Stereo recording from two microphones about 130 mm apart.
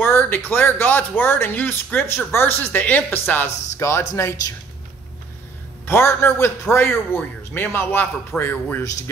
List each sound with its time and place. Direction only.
0.0 s a man's voice: 20° left (ahead or behind)
5.9 s a man's voice: 20° left (ahead or behind)